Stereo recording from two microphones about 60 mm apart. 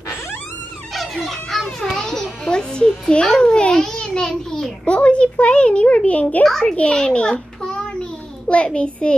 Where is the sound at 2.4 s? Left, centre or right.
Centre.